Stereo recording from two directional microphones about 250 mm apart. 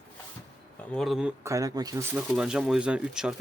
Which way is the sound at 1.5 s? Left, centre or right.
Centre.